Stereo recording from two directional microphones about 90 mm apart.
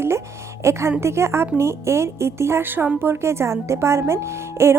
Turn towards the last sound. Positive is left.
turn(degrees=-30)  # may be behind; listen again after turning